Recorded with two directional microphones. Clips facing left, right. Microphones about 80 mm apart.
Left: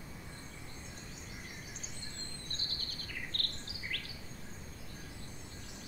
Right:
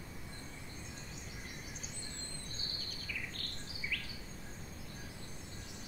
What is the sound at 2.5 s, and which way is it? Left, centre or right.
Bird vocalization, left.